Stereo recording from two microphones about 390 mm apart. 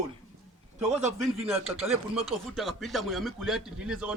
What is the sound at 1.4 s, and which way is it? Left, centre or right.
Speech, centre.